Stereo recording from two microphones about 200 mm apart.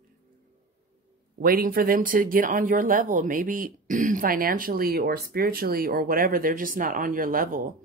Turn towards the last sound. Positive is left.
turn(degrees=-45)  # may be behind; listen again after turning